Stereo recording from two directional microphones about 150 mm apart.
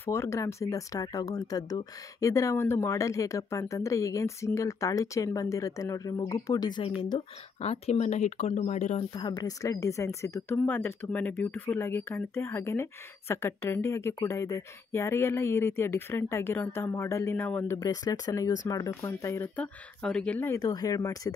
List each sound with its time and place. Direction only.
0.0 s speech: 15° left (ahead or behind); by 9.0 s 50° left (ahead or behind)
9.1 s speech: 30° left (ahead or behind); by 17.7 s 15° left (ahead or behind)
17.7 s speech: 25° left (ahead or behind)
20.5 s speech: 25° left (ahead or behind)